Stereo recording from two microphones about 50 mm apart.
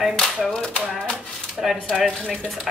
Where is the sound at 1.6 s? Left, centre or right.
Centre.